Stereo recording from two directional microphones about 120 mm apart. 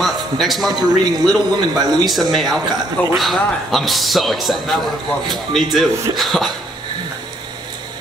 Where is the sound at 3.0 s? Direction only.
15° left (ahead or behind).